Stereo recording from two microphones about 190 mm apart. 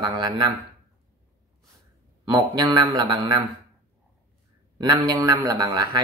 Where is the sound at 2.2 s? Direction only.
20° right (ahead or behind).